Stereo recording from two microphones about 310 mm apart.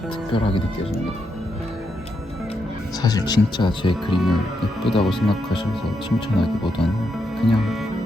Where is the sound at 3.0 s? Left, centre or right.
Centre.